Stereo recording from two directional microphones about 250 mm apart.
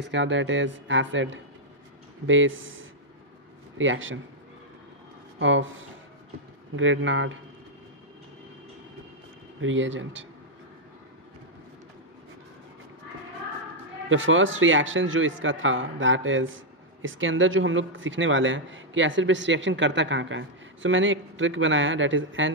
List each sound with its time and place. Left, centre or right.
0.0 s speech: right
5.4 s speech: right
9.6 s speech: right
14.0 s speech: right